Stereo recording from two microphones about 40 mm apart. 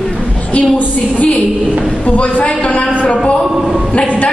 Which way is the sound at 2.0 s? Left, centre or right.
Left.